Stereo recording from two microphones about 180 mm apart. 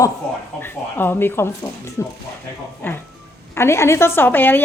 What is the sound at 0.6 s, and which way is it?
A woman's voice, 10° left (ahead or behind).